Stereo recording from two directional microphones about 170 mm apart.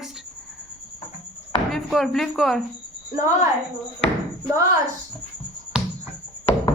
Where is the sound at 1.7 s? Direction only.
Centre (ahead or behind).